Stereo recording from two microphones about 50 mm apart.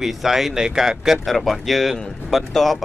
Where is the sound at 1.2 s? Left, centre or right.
Centre.